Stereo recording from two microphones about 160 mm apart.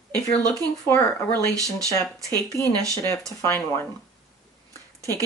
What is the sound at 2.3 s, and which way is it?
A woman's voice, 15° left (ahead or behind).